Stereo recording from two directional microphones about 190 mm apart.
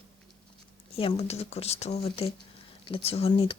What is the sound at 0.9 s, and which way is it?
Speech, 30° left (ahead or behind).